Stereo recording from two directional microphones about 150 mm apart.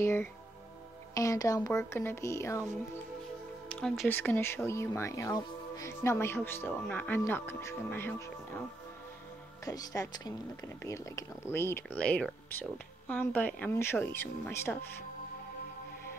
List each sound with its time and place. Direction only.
0.0 s speech: 15° left (ahead or behind)
1.1 s music: 20° left (ahead or behind)
3.6 s music: centre (ahead or behind)
4.1 s speech: 15° left (ahead or behind)
9.7 s speech: 25° left (ahead or behind)